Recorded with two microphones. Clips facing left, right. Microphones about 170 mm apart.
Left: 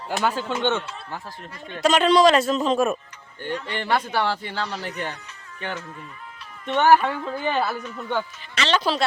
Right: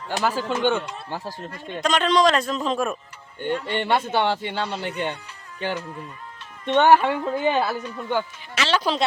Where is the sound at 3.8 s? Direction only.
25° right (ahead or behind).